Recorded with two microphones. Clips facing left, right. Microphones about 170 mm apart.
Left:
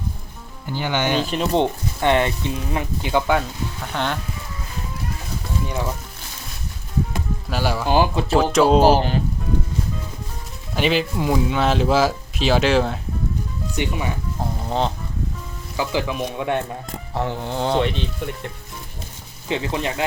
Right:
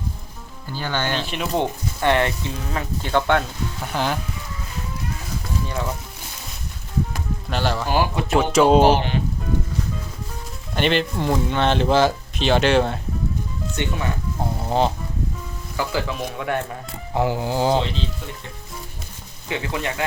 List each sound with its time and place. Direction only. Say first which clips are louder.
0.7 s speech: left 3 dB; 15° left (ahead or behind)
1.2 s speech: left 5 dB; 40° left (ahead or behind)
1.5 s speech: left 1 dB; 20° left (ahead or behind)
3.9 s speech: right 1 dB; 5° right (ahead or behind)
7.5 s speech: even; 10° left (ahead or behind)
7.9 s speech: left 3 dB; 25° left (ahead or behind)
8.4 s speech: even; centre (ahead or behind)
8.8 s speech: left 1 dB; 40° left (ahead or behind)
10.8 s speech: even; 5° left (ahead or behind)
13.7 s speech: left 2 dB; 15° left (ahead or behind)
14.6 s speech: right 3 dB; 5° right (ahead or behind)
15.8 s speech: left 2 dB; 15° left (ahead or behind)
17.2 s speech: right 3 dB; 5° right (ahead or behind)
19.5 s speech: left 2 dB; 25° left (ahead or behind)